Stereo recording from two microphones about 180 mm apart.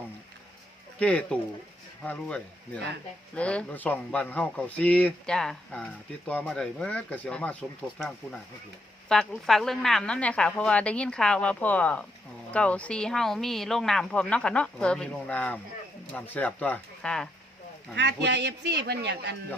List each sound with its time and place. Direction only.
0.9 s speech: 5° left (ahead or behind)
9.0 s speech: 5° left (ahead or behind)
17.9 s speech: 75° right (ahead or behind)